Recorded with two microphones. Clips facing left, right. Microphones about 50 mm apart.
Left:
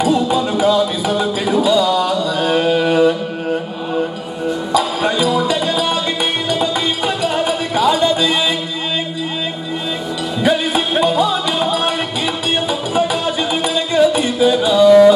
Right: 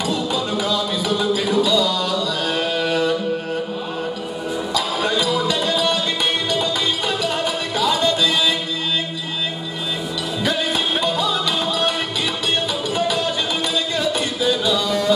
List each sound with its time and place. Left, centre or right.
0.0 s music: centre
4.7 s music: centre
10.4 s music: centre